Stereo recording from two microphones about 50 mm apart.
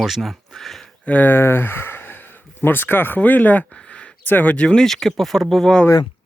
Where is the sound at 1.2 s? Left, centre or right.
Left.